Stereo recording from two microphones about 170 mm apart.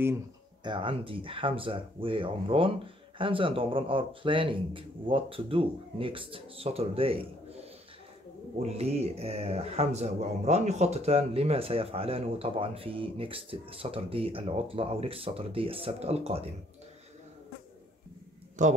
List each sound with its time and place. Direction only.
0.7 s speech: 30° right (ahead or behind)
8.6 s speech: 40° right (ahead or behind)
18.6 s speech: 45° right (ahead or behind)